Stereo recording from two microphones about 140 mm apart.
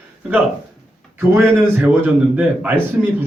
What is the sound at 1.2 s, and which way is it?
A man's voice, 15° right (ahead or behind).